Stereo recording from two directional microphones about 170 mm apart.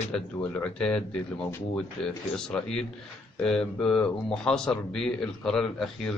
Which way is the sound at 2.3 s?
5° left (ahead or behind).